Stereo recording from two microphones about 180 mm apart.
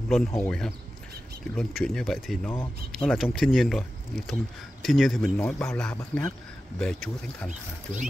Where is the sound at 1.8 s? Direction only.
Centre (ahead or behind).